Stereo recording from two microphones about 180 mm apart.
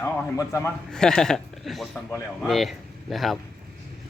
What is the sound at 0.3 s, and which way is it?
Speech, 15° left (ahead or behind).